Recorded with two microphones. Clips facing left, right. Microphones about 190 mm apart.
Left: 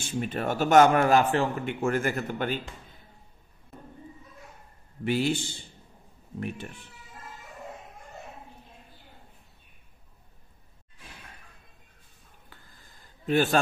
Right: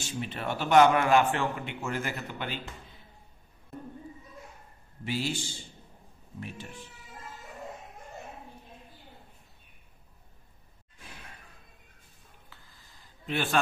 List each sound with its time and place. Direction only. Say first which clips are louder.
0.0 s a man's voice: left 5 dB; 45° left (ahead or behind)
1.8 s a man's voice: left 9 dB; 50° left (ahead or behind)
5.0 s a man's voice: left 6 dB; 55° left (ahead or behind)
12.4 s a sound: left 2 dB; 50° left (ahead or behind)